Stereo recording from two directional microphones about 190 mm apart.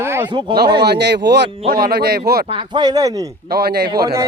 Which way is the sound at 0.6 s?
60° right (ahead or behind).